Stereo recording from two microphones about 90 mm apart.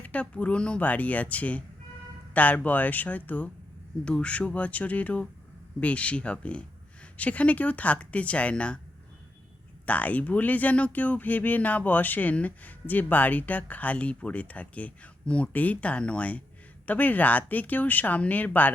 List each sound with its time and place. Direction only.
0.0 s speech: 15° left (ahead or behind)
9.8 s speech: 15° left (ahead or behind)